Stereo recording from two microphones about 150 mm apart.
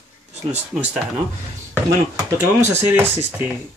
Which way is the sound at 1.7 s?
20° right (ahead or behind).